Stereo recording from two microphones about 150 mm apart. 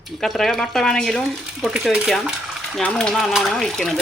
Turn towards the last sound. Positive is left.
turn(degrees=0)  # may be behind; listen again after turning